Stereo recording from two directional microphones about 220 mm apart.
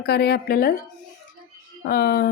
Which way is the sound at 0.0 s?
45° left (ahead or behind).